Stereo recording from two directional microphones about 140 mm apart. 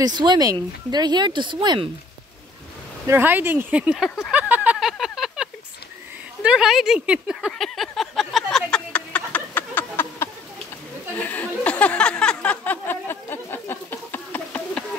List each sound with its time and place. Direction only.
0.0 s speech: 30° right (ahead or behind)
3.1 s speech: 15° right (ahead or behind)
4.3 s a sound: 10° right (ahead or behind); by 14.9 s 10° left (ahead or behind)